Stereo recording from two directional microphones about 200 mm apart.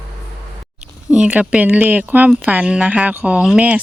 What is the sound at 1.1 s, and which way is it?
Speech, 5° right (ahead or behind).